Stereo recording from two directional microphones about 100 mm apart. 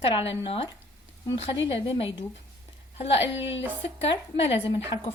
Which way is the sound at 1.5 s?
65° left (ahead or behind).